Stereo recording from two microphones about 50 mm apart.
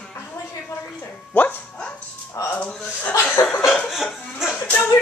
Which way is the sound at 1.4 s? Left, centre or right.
Left.